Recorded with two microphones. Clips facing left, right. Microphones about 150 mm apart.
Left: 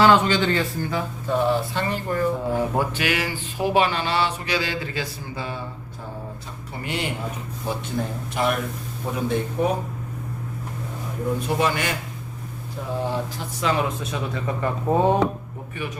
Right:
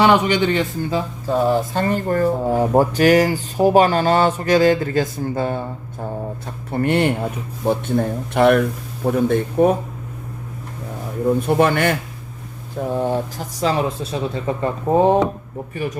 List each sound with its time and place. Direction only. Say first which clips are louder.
0.0 s a man's voice: right 2 dB; 15° right (ahead or behind)
1.5 s speech: right 5 dB; 45° right (ahead or behind)
11.3 s speech: right 6 dB; 55° right (ahead or behind)
13.6 s a man's voice: right 4 dB; 35° right (ahead or behind)